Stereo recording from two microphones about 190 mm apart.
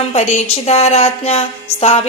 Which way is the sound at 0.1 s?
35° left (ahead or behind).